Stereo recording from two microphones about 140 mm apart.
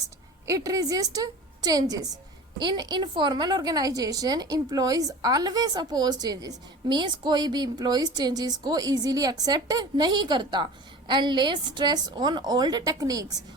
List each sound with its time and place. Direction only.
0.4 s a woman's voice: 25° right (ahead or behind)